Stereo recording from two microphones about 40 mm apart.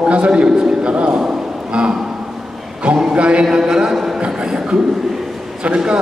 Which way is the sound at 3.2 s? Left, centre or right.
Right.